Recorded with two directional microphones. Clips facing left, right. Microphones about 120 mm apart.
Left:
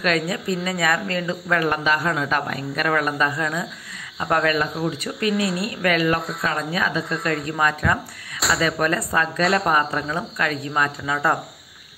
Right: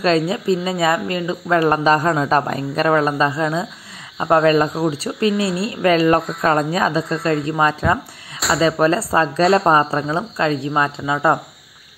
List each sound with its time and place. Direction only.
0.0 s speech: 25° right (ahead or behind)
1.6 s speech: 35° right (ahead or behind)